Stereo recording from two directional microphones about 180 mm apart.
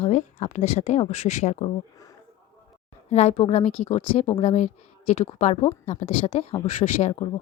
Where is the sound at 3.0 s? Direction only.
40° left (ahead or behind).